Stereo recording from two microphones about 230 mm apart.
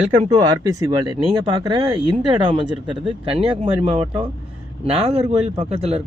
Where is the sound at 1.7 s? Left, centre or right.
Centre.